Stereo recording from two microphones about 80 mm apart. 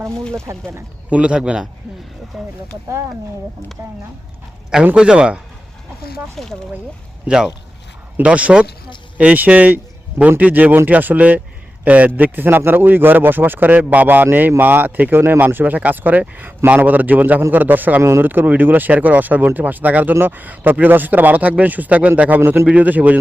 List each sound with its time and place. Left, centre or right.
0.4 s speech: right
1.1 s speech: centre
2.3 s speech: centre
4.9 s speech: centre
6.3 s speech: centre
7.3 s speech: centre